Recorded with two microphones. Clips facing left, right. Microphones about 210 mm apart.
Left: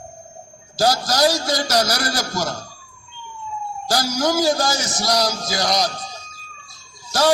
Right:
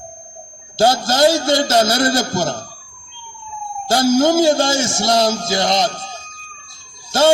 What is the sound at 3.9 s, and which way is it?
A man's voice, 25° right (ahead or behind).